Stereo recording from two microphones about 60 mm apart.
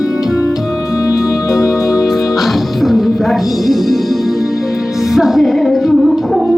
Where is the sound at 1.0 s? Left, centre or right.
Left.